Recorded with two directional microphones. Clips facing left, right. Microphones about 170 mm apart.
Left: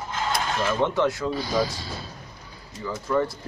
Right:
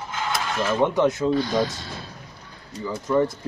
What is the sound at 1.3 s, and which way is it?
Speech, 5° left (ahead or behind).